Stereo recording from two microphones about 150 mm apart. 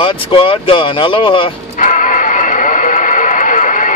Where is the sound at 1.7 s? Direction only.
60° left (ahead or behind).